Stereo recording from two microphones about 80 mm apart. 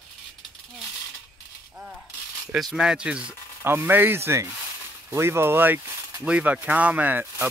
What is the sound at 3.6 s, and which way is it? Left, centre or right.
Speech, right.